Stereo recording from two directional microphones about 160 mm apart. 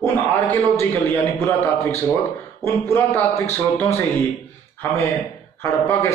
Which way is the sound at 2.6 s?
15° left (ahead or behind).